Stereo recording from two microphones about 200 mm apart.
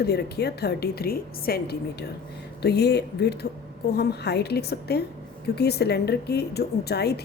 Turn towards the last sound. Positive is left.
turn(degrees=55)  # may be behind; listen again after turning